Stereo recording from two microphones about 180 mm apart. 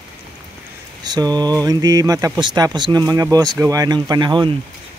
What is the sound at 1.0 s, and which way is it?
Speech, 20° right (ahead or behind).